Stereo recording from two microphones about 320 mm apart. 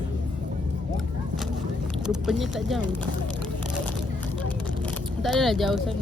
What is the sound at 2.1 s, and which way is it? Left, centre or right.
Speech, centre.